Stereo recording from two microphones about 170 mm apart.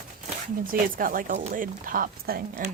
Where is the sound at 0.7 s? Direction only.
55° right (ahead or behind).